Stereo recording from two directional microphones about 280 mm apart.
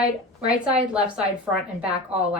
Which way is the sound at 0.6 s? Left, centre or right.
Centre.